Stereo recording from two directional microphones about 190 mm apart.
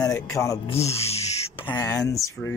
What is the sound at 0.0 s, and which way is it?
Speech, 15° left (ahead or behind).